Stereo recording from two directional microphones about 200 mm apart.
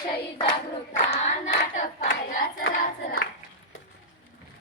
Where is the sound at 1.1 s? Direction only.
35° left (ahead or behind).